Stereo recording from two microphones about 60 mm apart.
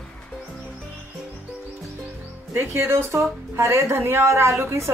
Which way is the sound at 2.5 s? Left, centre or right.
Right.